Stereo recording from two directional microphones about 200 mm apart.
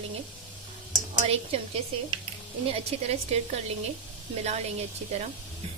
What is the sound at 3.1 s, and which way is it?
Speech, 30° right (ahead or behind).